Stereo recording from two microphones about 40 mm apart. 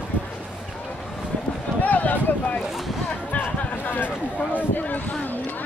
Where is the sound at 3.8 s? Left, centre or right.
Left.